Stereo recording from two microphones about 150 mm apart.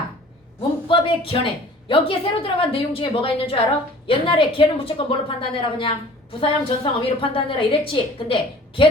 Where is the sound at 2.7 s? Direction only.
35° left (ahead or behind).